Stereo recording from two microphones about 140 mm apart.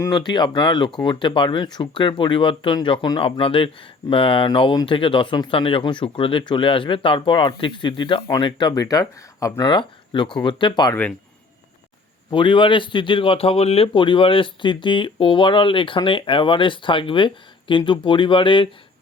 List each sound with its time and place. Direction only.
0.1 s a man's voice: 30° left (ahead or behind)
12.3 s a man's voice: 35° left (ahead or behind)